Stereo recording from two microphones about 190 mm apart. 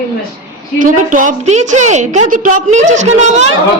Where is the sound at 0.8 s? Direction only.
45° right (ahead or behind).